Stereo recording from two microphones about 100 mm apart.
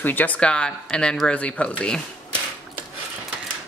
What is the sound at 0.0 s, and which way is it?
Speech, 20° left (ahead or behind).